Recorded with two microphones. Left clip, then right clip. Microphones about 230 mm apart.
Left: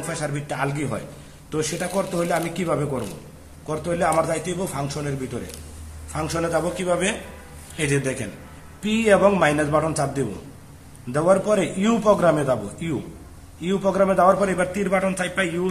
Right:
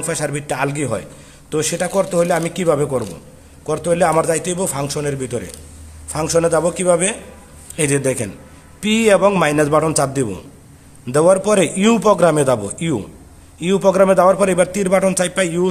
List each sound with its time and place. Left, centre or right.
0.0 s a man's voice: right